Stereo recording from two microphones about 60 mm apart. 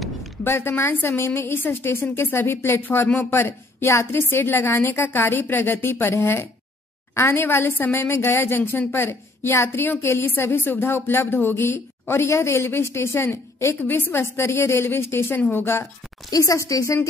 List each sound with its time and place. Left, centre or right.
0.4 s a woman's voice: left
12.2 s a woman's voice: left
16.3 s speech: left